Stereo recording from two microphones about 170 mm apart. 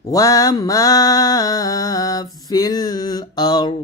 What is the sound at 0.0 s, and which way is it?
Mantra, 20° left (ahead or behind).